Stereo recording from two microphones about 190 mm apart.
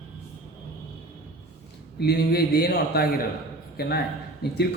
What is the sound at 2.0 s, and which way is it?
A man's voice, 55° left (ahead or behind).